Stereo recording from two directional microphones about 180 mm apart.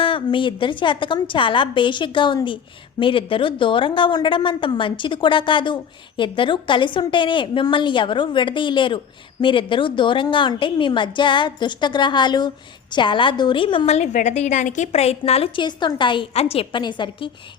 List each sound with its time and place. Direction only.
0.0 s a woman's voice: 30° left (ahead or behind)